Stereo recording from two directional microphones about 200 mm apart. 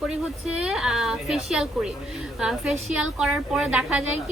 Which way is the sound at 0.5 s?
5° right (ahead or behind).